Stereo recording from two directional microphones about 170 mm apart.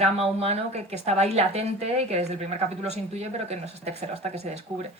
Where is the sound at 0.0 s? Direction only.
40° right (ahead or behind).